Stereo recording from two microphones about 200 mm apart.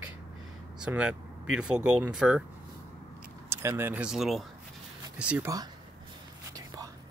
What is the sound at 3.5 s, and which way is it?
Speech, 10° right (ahead or behind).